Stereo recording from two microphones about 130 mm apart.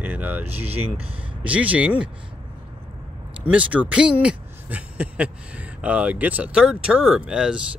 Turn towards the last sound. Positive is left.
turn(degrees=-5)  # may be behind; listen again after turning